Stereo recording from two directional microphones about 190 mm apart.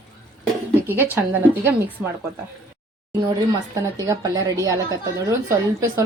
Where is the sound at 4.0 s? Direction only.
20° right (ahead or behind).